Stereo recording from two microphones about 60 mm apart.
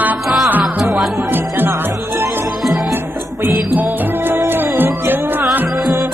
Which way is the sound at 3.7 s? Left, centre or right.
Right.